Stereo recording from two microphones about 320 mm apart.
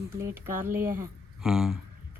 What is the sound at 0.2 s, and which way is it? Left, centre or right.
A woman's voice, centre.